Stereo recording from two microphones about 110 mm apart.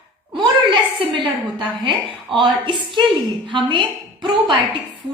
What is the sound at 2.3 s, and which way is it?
A woman's voice, 50° right (ahead or behind).